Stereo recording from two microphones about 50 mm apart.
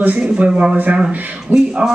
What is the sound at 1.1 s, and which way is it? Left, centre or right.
Speech, right.